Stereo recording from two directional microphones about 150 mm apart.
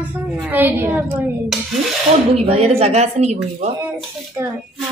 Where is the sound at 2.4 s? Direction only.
45° right (ahead or behind).